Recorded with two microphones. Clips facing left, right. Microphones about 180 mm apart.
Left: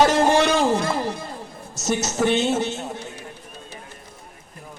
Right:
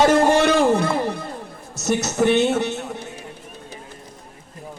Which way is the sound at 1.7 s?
60° right (ahead or behind).